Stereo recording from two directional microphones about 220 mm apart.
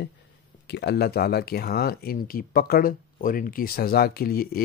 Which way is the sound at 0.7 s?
50° left (ahead or behind).